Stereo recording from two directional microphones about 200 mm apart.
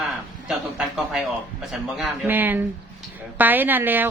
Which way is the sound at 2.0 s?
10° right (ahead or behind).